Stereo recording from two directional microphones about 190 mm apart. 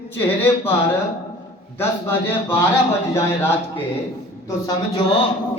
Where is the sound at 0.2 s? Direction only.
10° left (ahead or behind).